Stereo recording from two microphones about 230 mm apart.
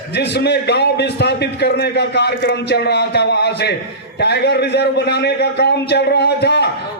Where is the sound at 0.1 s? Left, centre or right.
Left.